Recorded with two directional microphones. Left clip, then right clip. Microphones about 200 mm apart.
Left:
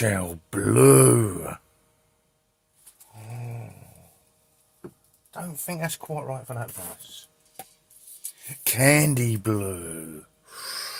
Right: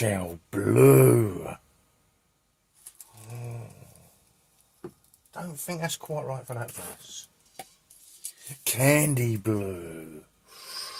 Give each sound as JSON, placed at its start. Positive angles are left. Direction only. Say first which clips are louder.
{"t": 0.0, "sound": "speech", "louder": "left 3 dB", "side_deg": 30}
{"t": 3.2, "sound": "a sound", "louder": "left 1 dB", "side_deg": 45}
{"t": 5.3, "sound": "speech", "louder": "left 1 dB", "side_deg": 45}
{"t": 8.6, "sound": "mantra", "louder": "left 3 dB", "side_deg": 40}